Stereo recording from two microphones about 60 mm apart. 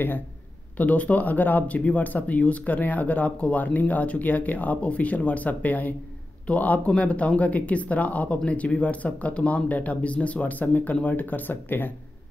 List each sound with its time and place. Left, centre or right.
0.7 s speech: left